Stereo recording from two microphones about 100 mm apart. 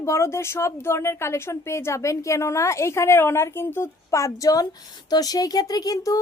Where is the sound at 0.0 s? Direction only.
30° left (ahead or behind).